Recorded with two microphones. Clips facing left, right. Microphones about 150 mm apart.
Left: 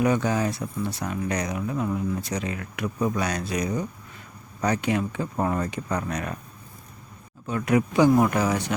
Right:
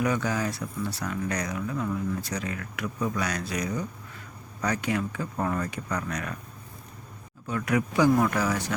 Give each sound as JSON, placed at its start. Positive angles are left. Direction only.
{"t": 0.0, "sound": "speech", "side_deg": 25}
{"t": 7.4, "sound": "speech", "side_deg": 25}